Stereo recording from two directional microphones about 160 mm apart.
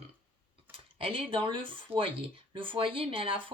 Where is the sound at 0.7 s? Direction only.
35° right (ahead or behind).